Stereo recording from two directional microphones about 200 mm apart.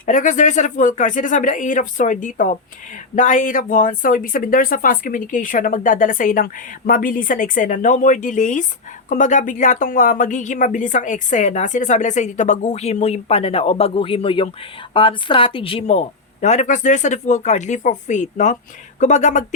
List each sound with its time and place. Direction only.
0.0 s speech: 40° left (ahead or behind)